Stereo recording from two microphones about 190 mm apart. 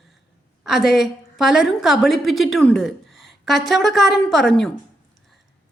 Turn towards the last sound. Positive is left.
turn(degrees=5)  # may be behind; listen again after turning